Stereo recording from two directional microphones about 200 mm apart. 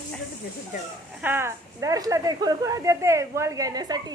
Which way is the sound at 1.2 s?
10° right (ahead or behind).